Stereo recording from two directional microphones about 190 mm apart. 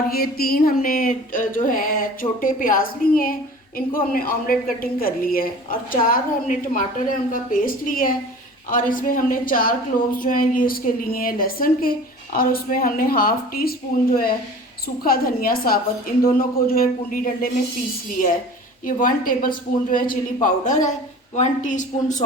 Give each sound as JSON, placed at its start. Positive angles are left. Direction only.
{"t": 0.1, "sound": "speech", "side_deg": 50}
{"t": 15.0, "sound": "speech", "side_deg": 50}
{"t": 18.9, "sound": "a woman's voice", "side_deg": 45}